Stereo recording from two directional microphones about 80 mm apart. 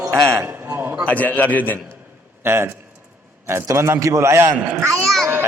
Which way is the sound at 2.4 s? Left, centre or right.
Right.